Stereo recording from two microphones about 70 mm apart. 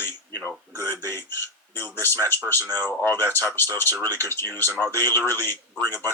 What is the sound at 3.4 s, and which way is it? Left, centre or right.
Speech, left.